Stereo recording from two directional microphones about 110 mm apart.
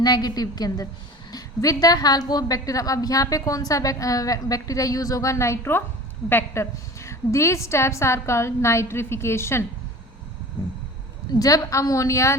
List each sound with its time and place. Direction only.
0.0 s a woman's voice: 40° left (ahead or behind)
11.3 s a woman's voice: 35° left (ahead or behind)